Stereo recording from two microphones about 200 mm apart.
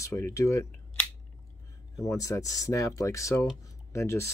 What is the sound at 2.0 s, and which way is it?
Speech, 15° left (ahead or behind).